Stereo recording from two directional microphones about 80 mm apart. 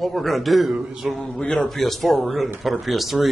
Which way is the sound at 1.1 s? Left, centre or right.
Centre.